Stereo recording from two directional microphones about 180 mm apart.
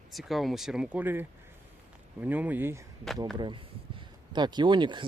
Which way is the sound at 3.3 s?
25° right (ahead or behind).